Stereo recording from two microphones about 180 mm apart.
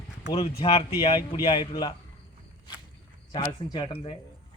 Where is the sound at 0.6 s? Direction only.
30° left (ahead or behind).